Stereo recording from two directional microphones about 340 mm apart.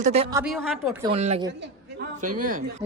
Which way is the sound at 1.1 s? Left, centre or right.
Centre.